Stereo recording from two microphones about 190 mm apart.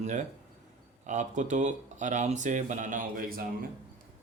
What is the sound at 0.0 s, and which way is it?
Speech, 40° right (ahead or behind).